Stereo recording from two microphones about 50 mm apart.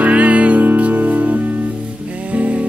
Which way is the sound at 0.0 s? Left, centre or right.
Right.